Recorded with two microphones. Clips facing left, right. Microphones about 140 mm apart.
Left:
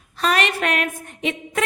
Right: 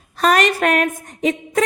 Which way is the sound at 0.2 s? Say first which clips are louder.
Right 5 dB; 45° right (ahead or behind).